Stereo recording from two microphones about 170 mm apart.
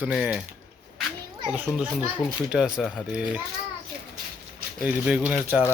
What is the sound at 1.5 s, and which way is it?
Speech, 10° right (ahead or behind).